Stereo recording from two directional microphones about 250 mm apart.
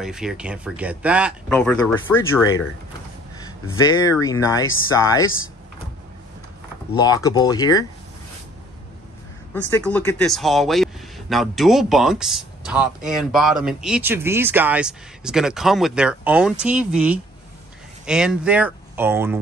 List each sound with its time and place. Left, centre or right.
0.0 s speech: centre
7.0 s speech: centre
9.5 s speech: centre